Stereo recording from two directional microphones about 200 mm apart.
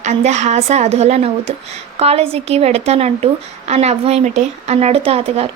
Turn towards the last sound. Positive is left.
turn(degrees=-30)  # may be behind; listen again after turning